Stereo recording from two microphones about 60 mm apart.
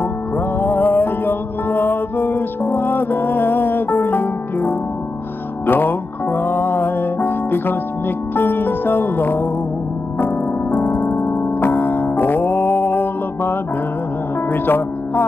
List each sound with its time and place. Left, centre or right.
0.6 s music: left
5.7 s music: left
11.2 s music: left